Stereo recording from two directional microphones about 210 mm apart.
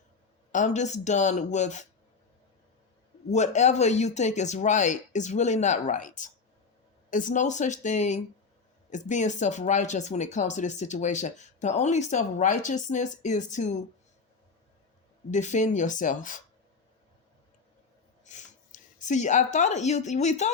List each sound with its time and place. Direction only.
0.5 s speech: 35° left (ahead or behind)
3.3 s speech: 35° left (ahead or behind)
15.3 s speech: 35° left (ahead or behind)
18.3 s speech: 35° left (ahead or behind)